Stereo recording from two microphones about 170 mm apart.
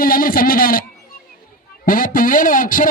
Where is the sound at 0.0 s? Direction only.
55° left (ahead or behind).